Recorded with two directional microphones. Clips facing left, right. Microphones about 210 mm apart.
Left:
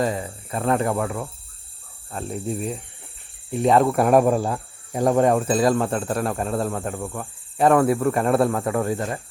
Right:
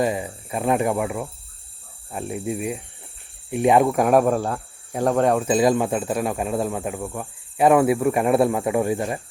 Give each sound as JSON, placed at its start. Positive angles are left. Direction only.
{"t": 0.0, "sound": "cricket", "side_deg": -15}
{"t": 3.8, "sound": "cricket", "side_deg": 0}
{"t": 5.5, "sound": "cricket", "side_deg": -20}